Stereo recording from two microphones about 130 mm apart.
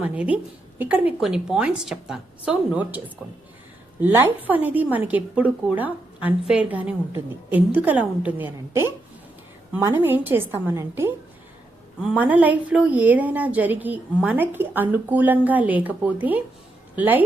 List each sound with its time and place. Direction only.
0.0 s a woman's voice: 10° right (ahead or behind)
4.0 s speech: 15° right (ahead or behind)